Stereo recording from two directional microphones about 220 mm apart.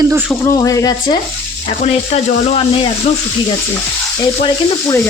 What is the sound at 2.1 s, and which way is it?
Speech, 30° left (ahead or behind).